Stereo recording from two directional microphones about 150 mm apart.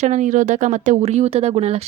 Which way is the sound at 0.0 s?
55° right (ahead or behind).